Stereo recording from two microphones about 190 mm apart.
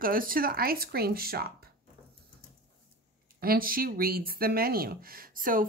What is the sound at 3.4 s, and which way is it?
Speech, 50° right (ahead or behind).